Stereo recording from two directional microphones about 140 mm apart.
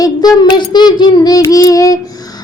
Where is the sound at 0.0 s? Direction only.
30° left (ahead or behind).